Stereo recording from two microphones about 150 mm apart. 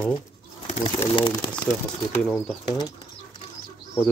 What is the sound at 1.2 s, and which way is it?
Speech, 35° left (ahead or behind).